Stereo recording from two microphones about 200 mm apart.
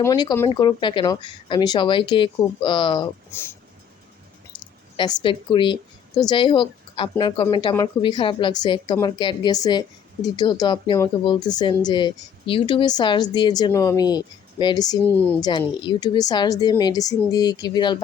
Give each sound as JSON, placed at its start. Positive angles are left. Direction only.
{"t": 0.0, "sound": "a woman's voice", "side_deg": 20}
{"t": 4.9, "sound": "a woman's voice", "side_deg": 25}